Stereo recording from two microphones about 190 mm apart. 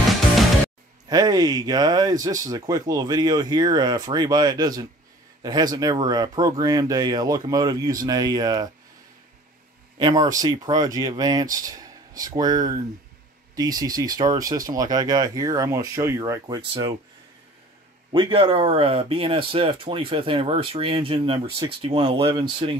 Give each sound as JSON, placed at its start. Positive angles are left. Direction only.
{"t": 1.0, "sound": "speech", "side_deg": -20}
{"t": 9.9, "sound": "speech", "side_deg": -20}
{"t": 18.1, "sound": "speech", "side_deg": -30}